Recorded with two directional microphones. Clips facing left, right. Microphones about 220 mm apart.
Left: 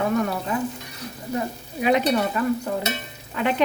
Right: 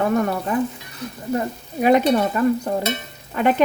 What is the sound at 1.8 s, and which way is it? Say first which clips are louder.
Speech: right 4 dB; 50° right (ahead or behind).